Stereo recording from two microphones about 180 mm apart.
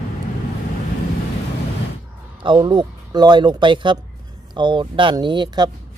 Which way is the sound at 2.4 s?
25° right (ahead or behind).